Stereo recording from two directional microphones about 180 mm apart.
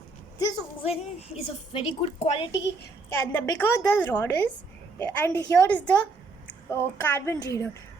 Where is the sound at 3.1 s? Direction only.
15° left (ahead or behind).